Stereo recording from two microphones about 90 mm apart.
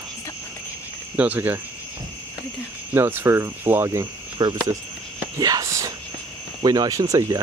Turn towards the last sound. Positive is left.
turn(degrees=-40)  # may be behind; listen again after turning